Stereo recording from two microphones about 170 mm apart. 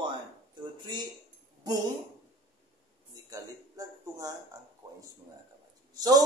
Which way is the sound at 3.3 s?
20° right (ahead or behind).